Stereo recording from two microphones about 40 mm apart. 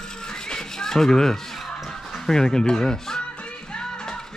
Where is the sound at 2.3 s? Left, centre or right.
Centre.